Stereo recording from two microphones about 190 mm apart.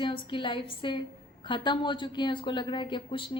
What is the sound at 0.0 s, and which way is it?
A woman's voice, 25° left (ahead or behind).